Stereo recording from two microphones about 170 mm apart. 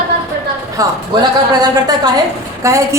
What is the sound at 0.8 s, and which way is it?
A woman's voice, 20° right (ahead or behind).